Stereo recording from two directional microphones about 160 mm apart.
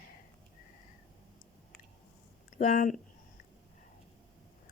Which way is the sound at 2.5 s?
55° left (ahead or behind).